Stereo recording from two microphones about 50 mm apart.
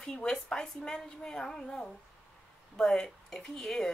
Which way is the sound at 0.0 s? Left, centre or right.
Centre.